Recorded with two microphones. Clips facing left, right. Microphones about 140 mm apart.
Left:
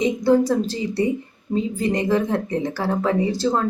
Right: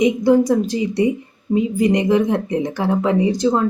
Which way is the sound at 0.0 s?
15° right (ahead or behind).